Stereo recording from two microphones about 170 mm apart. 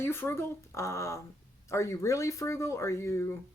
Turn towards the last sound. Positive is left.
turn(degrees=15)  # may be behind; listen again after turning